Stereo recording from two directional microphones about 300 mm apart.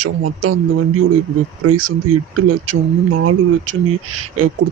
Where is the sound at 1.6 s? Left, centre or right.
Right.